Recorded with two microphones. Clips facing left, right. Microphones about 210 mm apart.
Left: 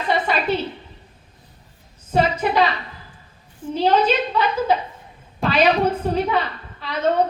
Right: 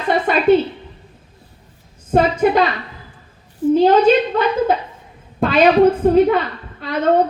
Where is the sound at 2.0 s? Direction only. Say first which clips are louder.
Right 5 dB; 50° right (ahead or behind).